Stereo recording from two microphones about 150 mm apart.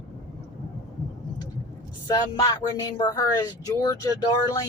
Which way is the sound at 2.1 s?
25° left (ahead or behind).